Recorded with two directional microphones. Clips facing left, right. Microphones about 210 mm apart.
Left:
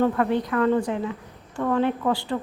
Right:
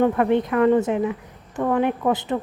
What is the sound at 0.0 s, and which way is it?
Speech, 20° right (ahead or behind).